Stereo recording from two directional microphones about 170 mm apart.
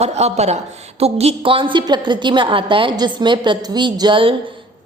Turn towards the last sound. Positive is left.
turn(degrees=-30)  # may be behind; listen again after turning